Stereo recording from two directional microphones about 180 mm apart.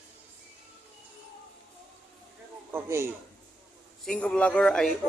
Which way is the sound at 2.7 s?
15° right (ahead or behind).